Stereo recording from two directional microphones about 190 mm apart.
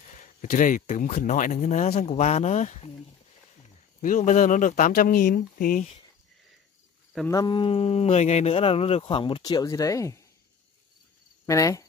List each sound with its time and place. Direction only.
0.2 s speech: 45° left (ahead or behind)
4.0 s speech: 40° left (ahead or behind)
7.2 s speech: 20° left (ahead or behind)
11.4 s speech: 15° left (ahead or behind)